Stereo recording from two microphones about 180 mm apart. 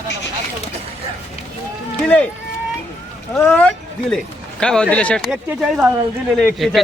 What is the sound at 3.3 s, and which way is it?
A man's voice, 10° left (ahead or behind).